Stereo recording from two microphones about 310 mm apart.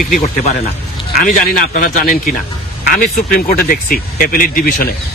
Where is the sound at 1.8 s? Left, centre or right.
Left.